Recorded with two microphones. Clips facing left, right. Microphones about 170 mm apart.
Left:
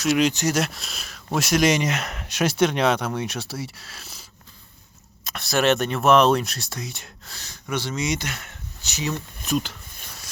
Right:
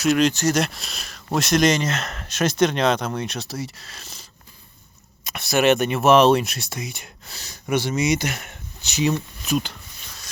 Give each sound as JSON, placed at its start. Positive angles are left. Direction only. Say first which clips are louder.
{"t": 0.2, "sound": "speech", "louder": "right 2 dB", "side_deg": 10}
{"t": 5.2, "sound": "a sound", "louder": "right 2 dB", "side_deg": 0}
{"t": 5.5, "sound": "speech", "louder": "right 3 dB", "side_deg": -15}
{"t": 6.1, "sound": "speech", "louder": "right 2 dB", "side_deg": -5}
{"t": 9.5, "sound": "speech", "louder": "right 1 dB", "side_deg": 0}